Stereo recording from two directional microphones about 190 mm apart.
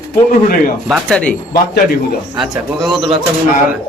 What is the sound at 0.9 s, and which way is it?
Speech, centre (ahead or behind).